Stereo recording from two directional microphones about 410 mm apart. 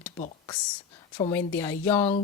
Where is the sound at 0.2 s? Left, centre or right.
Centre.